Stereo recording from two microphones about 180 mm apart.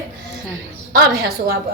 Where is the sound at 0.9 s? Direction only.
55° right (ahead or behind).